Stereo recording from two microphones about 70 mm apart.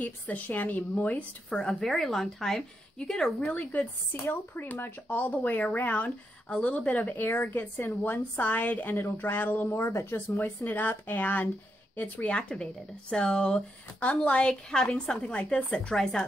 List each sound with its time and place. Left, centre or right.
0.3 s a woman's voice: left
1.6 s a woman's voice: centre
4.1 s a woman's voice: left
8.9 s a woman's voice: left
9.7 s speech: left; by 15.2 s centre
15.2 s speech: centre
15.9 s a woman's voice: centre